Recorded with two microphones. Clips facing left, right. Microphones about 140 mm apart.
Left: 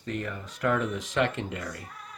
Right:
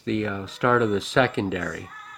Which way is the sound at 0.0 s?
90° right.